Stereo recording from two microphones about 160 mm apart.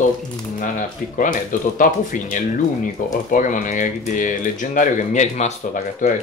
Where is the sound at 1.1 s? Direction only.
55° left (ahead or behind).